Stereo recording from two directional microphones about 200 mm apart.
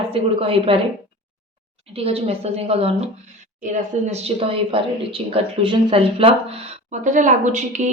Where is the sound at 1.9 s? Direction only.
30° right (ahead or behind).